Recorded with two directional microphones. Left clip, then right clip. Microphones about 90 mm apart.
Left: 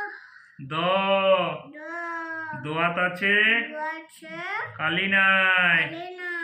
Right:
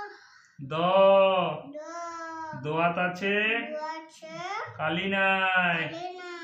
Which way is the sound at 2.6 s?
30° right (ahead or behind).